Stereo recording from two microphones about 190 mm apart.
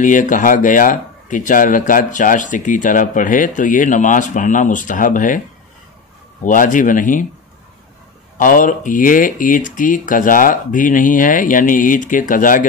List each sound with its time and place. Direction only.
0.0 s speech: 40° left (ahead or behind)
6.4 s speech: 45° left (ahead or behind)
8.4 s speech: 45° left (ahead or behind)